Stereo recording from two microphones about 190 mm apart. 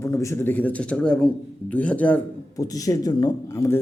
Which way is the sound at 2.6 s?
20° left (ahead or behind).